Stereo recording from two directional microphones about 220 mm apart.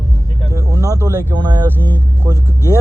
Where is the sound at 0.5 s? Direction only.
15° right (ahead or behind).